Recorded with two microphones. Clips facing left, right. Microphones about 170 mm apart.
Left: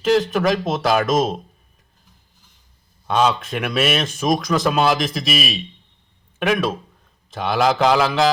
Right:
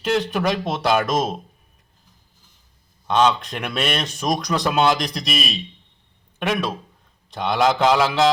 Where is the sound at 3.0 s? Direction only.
5° left (ahead or behind).